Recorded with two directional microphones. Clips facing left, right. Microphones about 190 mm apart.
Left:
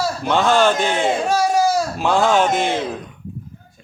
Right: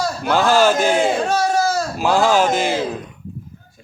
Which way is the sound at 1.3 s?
10° left (ahead or behind).